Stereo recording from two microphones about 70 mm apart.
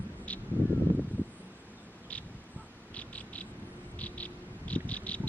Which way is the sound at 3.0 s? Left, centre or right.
Centre.